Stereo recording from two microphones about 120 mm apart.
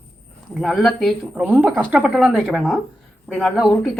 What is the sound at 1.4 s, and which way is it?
A woman's voice, 15° right (ahead or behind).